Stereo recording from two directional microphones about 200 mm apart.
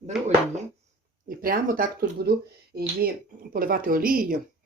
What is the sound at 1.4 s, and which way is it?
Speech, 45° right (ahead or behind).